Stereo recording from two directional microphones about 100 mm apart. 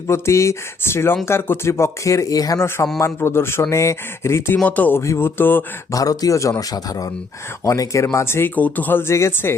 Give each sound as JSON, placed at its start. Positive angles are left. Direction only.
{"t": 0.1, "sound": "speech", "side_deg": 30}
{"t": 2.6, "sound": "speech", "side_deg": 25}
{"t": 5.9, "sound": "speech", "side_deg": 35}